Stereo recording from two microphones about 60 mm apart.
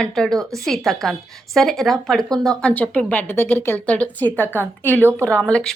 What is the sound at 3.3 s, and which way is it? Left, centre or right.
Speech, left.